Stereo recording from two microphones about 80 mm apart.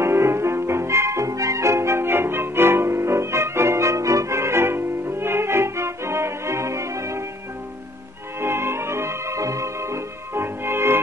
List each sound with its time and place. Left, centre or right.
0.0 s music: right
8.4 s music: right